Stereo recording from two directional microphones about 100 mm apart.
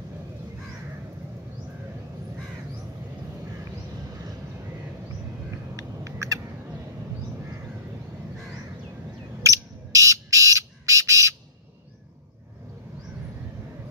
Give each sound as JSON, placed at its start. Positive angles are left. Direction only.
{"t": 5.8, "sound": "rodents", "side_deg": -35}
{"t": 9.4, "sound": "bird", "side_deg": -30}